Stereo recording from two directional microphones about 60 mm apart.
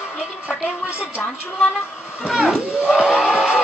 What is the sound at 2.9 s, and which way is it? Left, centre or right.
Music, centre.